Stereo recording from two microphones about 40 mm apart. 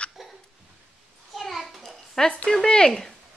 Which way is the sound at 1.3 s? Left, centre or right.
Centre.